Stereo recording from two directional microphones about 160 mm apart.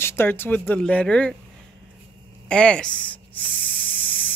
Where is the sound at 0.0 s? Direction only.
15° left (ahead or behind).